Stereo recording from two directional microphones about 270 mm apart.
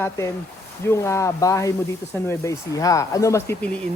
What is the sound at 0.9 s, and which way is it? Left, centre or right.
Speech, centre.